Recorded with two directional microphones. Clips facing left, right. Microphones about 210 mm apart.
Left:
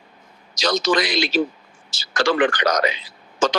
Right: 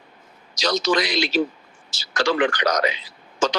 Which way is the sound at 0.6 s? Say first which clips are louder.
Left 1 dB; 50° left (ahead or behind).